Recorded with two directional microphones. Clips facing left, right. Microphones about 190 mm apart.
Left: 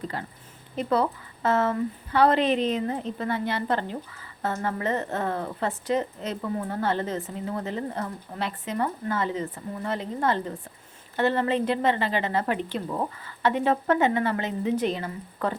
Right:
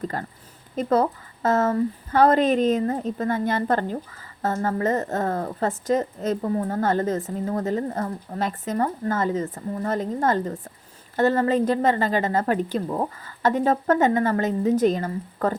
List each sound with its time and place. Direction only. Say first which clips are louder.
0.8 s a woman's voice: right 3 dB; 40° right (ahead or behind)